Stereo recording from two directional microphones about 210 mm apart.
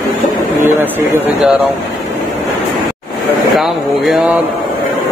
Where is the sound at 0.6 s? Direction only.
10° right (ahead or behind).